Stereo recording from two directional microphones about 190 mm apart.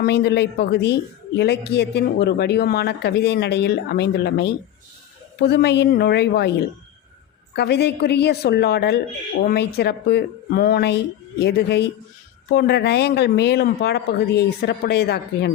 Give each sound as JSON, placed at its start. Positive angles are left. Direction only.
{"t": 0.0, "sound": "speech", "side_deg": 55}
{"t": 7.5, "sound": "speech", "side_deg": 60}